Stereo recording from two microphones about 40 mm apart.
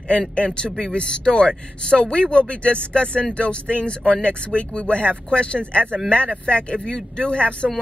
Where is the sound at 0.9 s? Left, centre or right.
Left.